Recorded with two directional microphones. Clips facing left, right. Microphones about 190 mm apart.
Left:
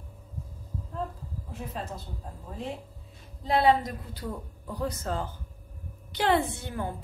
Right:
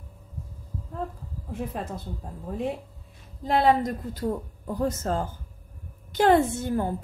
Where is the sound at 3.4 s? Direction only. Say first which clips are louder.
Right 2 dB; 50° right (ahead or behind).